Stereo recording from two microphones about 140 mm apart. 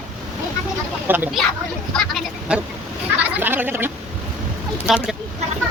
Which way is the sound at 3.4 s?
15° right (ahead or behind).